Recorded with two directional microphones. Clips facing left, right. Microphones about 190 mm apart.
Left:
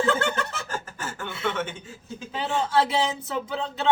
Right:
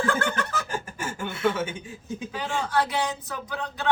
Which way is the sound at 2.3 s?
25° left (ahead or behind).